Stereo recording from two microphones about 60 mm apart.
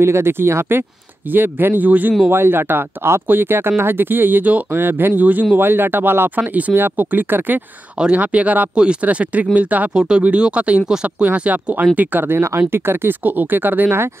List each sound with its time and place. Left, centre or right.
0.0 s speech: right
8.0 s speech: right
9.9 s speech: centre
11.2 s speech: right